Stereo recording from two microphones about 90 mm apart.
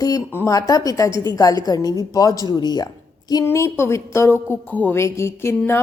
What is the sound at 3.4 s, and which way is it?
A woman's voice, 30° left (ahead or behind).